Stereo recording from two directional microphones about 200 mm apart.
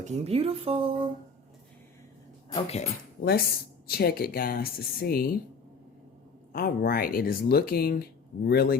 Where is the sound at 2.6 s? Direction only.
30° left (ahead or behind).